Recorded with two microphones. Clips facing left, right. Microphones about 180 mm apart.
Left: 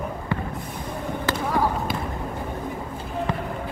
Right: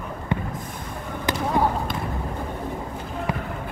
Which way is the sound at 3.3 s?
10° right (ahead or behind).